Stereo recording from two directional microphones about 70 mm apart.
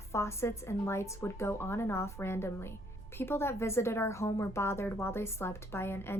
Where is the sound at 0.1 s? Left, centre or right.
Left.